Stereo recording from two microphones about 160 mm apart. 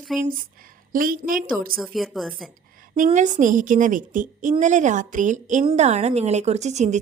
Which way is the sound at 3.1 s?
50° right (ahead or behind).